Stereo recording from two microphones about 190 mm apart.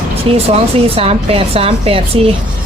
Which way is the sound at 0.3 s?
30° right (ahead or behind).